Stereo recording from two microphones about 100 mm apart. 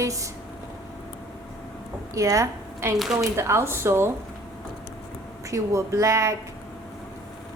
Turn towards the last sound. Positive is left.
turn(degrees=-35)  # may be behind; listen again after turning